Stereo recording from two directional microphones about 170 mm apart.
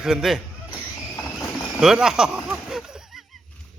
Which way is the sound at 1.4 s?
5° right (ahead or behind).